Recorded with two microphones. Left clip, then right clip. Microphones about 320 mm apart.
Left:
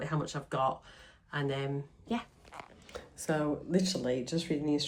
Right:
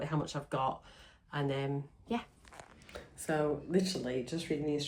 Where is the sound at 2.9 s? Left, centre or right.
Centre.